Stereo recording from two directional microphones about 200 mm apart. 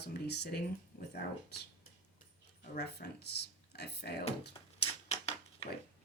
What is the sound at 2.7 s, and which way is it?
Speech, 55° left (ahead or behind).